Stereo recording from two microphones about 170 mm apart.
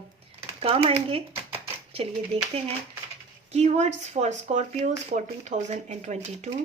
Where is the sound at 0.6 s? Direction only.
35° right (ahead or behind).